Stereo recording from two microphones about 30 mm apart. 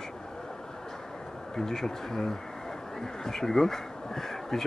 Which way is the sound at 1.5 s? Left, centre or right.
Centre.